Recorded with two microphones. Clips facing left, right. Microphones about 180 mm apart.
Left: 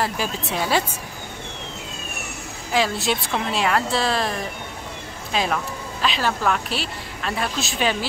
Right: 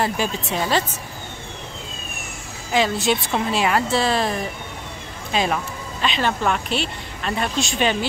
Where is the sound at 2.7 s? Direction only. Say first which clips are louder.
Right 2 dB; centre (ahead or behind).